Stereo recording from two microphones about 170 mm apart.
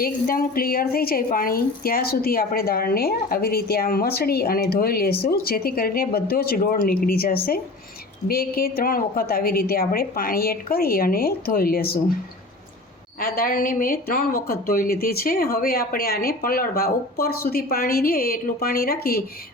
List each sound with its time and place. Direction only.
0.0 s a woman's voice: 60° left (ahead or behind)
13.1 s a woman's voice: 60° left (ahead or behind)